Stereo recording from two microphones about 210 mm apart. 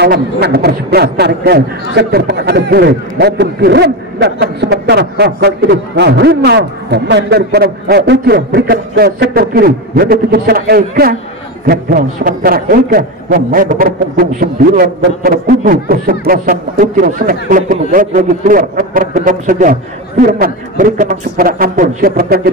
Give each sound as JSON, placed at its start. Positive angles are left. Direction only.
{"t": 0.0, "sound": "a man's voice", "side_deg": -50}